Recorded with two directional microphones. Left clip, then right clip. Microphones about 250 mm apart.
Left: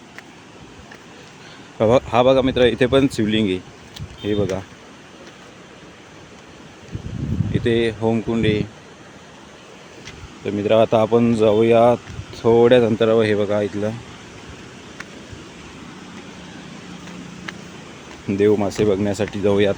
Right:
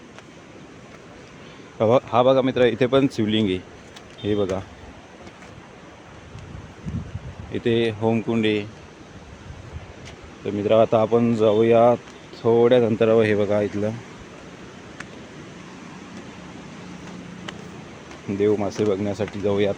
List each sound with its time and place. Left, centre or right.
1.8 s speech: centre
7.5 s speech: centre
10.4 s speech: centre
18.3 s speech: left